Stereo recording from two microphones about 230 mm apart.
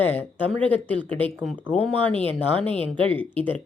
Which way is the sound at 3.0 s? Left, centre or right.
Right.